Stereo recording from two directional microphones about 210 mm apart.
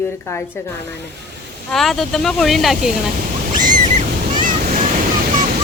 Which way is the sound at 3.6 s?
40° right (ahead or behind).